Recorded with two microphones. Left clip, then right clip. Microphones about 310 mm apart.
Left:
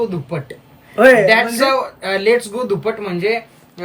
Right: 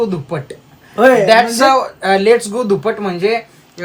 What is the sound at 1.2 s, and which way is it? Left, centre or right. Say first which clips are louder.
Speech: right 4 dB; right.